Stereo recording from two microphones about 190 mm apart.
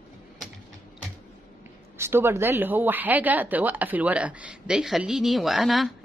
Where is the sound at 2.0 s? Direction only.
10° right (ahead or behind).